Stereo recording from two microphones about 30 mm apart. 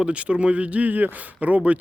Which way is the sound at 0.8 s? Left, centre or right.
Right.